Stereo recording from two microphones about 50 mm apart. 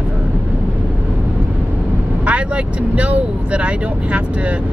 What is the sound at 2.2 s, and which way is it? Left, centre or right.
Speech, right.